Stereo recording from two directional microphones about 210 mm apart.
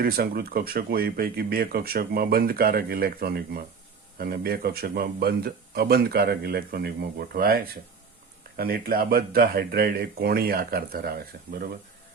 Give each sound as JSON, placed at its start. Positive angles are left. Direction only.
{"t": 0.0, "sound": "speech", "side_deg": -45}